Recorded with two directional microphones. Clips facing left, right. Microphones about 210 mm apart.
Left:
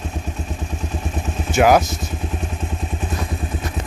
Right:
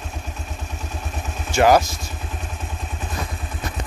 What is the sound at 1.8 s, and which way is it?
Speech, 20° left (ahead or behind).